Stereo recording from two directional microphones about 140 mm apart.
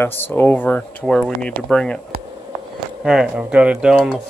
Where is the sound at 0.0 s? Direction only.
15° left (ahead or behind).